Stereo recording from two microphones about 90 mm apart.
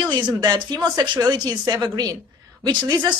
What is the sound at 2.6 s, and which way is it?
Speech, 50° right (ahead or behind).